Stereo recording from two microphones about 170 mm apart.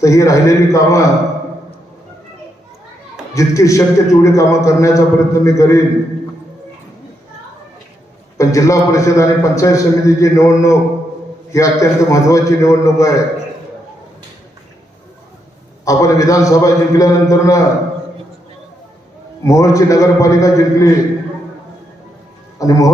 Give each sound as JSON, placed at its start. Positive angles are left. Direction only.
{"t": 0.0, "sound": "a man's voice", "side_deg": 20}
{"t": 3.3, "sound": "a man's voice", "side_deg": 20}
{"t": 8.4, "sound": "a man's voice", "side_deg": 20}
{"t": 15.8, "sound": "a man's voice", "side_deg": 20}
{"t": 19.5, "sound": "a man's voice", "side_deg": 20}
{"t": 22.5, "sound": "a man's voice", "side_deg": 20}